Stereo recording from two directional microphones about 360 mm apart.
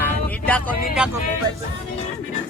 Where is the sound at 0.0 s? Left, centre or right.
Centre.